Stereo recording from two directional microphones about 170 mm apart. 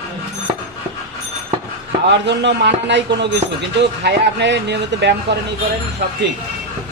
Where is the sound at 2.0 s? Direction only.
90° right.